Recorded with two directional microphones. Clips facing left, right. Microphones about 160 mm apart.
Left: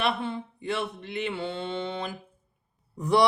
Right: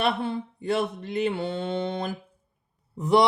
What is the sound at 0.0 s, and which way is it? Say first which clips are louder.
Mantra: right 3 dB; 40° right (ahead or behind).